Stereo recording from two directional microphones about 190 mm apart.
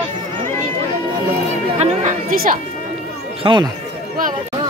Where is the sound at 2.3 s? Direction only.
50° right (ahead or behind).